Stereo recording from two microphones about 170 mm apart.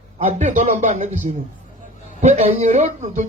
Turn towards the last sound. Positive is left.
turn(degrees=-45)  # may be behind; listen again after turning